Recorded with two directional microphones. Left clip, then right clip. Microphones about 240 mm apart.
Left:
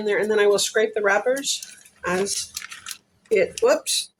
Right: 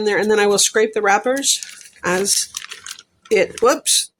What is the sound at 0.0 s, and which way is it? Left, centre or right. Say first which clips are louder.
Speech: right 4 dB; right.